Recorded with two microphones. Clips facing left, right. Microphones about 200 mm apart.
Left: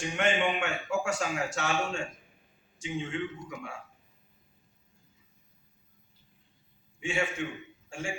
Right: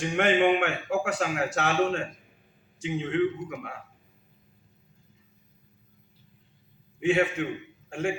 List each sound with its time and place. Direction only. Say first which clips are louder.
0.0 s speech: right 6 dB; 55° right (ahead or behind)
7.0 s a man's voice: right 8 dB; 60° right (ahead or behind)